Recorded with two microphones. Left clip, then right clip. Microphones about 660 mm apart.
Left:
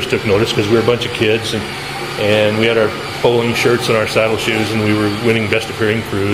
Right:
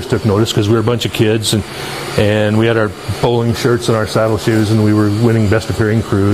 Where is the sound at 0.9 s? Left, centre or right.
Right.